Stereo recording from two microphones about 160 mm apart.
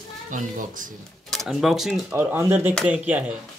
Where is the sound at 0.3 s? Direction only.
55° right (ahead or behind).